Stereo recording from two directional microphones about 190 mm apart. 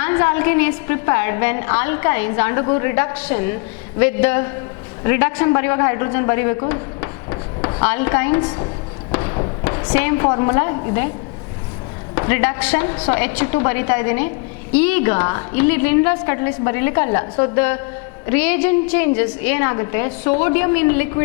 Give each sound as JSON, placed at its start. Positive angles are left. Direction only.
{"t": 0.0, "sound": "a woman's voice", "side_deg": 15}
{"t": 6.7, "sound": "a sound", "side_deg": 20}
{"t": 8.4, "sound": "a woman's voice", "side_deg": 25}
{"t": 9.1, "sound": "a sound", "side_deg": 20}
{"t": 9.9, "sound": "a woman's voice", "side_deg": 15}
{"t": 12.1, "sound": "a woman's voice", "side_deg": 20}